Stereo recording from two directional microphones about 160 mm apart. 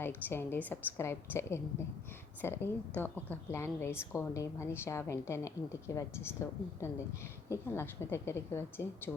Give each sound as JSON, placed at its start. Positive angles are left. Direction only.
{"t": 0.0, "sound": "a woman's voice", "side_deg": 15}